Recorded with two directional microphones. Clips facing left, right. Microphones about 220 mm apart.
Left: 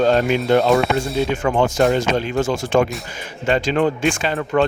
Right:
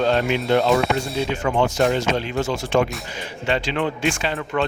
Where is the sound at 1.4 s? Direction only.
50° left (ahead or behind).